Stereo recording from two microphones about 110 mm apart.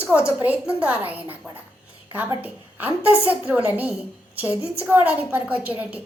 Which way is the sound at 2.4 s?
15° right (ahead or behind).